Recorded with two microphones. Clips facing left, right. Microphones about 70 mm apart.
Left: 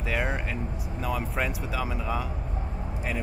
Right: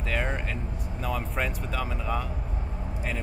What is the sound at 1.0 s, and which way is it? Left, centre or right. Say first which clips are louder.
Speech: left 1 dB; centre.